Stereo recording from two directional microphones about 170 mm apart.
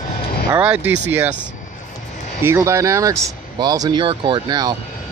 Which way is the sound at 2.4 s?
15° right (ahead or behind).